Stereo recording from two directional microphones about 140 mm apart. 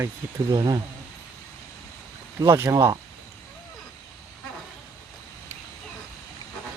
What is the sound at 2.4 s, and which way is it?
Speech, 20° right (ahead or behind).